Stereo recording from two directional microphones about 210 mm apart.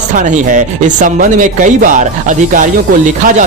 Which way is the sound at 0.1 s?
35° right (ahead or behind).